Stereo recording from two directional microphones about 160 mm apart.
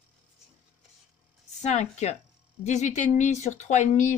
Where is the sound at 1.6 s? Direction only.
45° left (ahead or behind).